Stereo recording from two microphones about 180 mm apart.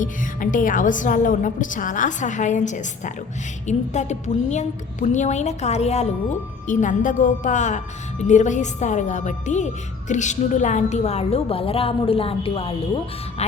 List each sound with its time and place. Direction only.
0.0 s a woman's voice: 45° left (ahead or behind); by 12.7 s 30° left (ahead or behind)